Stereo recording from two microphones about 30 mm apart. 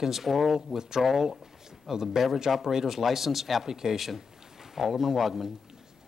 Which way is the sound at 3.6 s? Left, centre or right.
Centre.